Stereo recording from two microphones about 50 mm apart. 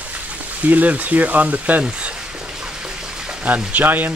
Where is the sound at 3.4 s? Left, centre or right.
Right.